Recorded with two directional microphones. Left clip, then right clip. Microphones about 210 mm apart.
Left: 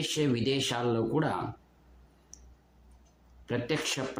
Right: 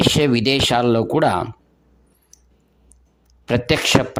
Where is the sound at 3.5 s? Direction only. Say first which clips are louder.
Right 14 dB; 50° right (ahead or behind).